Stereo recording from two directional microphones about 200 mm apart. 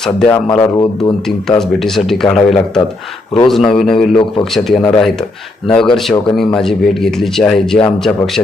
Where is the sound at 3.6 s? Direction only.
25° left (ahead or behind).